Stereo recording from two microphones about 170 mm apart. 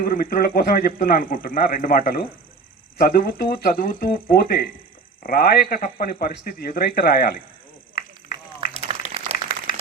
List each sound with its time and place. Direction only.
0.0 s a man's voice: 60° left (ahead or behind)
8.9 s applause: 35° right (ahead or behind)